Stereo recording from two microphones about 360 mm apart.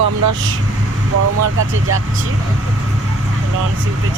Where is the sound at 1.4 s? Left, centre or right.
Right.